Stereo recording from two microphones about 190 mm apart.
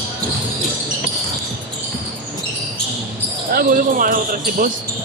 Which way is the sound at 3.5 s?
50° right (ahead or behind).